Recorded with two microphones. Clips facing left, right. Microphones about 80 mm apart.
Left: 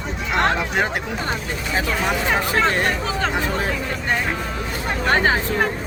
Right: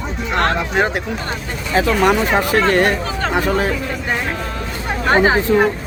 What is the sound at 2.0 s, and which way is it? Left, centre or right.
Speech, right.